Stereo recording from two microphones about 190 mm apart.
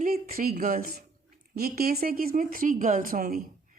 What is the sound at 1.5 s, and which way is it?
A woman's voice, 50° right (ahead or behind).